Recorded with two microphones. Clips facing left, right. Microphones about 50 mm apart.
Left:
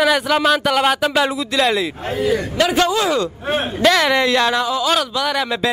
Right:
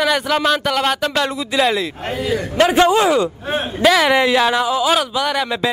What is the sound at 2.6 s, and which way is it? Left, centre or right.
Speech, right.